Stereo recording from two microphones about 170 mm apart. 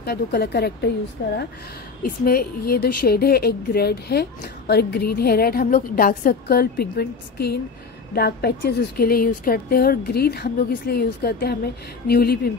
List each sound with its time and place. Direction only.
0.0 s speech: 70° left (ahead or behind)
2.0 s a woman's voice: 60° left (ahead or behind)